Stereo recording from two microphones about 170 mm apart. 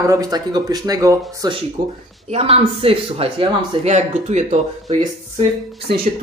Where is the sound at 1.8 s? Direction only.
55° right (ahead or behind).